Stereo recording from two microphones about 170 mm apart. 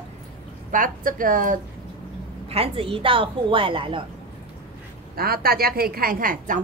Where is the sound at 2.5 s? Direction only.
35° right (ahead or behind).